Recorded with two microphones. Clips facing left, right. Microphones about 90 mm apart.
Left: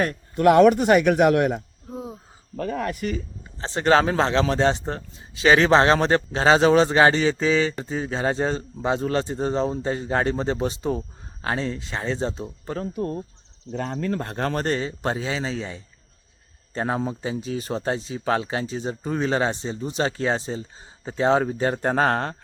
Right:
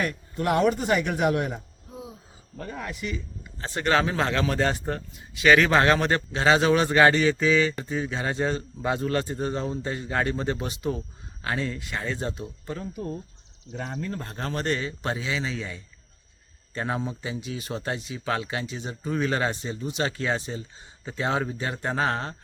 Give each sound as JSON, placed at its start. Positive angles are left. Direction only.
{"t": 0.3, "sound": "speech", "side_deg": 70}
{"t": 3.6, "sound": "a man's voice", "side_deg": 30}
{"t": 12.8, "sound": "speech", "side_deg": 50}
{"t": 13.8, "sound": "speech", "side_deg": 80}
{"t": 14.5, "sound": "speech", "side_deg": 35}